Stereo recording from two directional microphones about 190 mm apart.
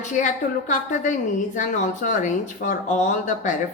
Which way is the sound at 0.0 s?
40° left (ahead or behind).